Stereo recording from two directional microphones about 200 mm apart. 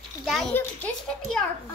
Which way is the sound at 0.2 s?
Centre (ahead or behind).